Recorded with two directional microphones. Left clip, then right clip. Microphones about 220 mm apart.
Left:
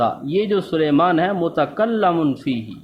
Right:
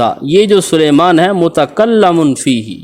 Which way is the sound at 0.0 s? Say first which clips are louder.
Right 10 dB; 45° right (ahead or behind).